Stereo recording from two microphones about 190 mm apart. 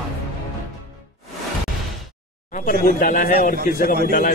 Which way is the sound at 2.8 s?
45° left (ahead or behind).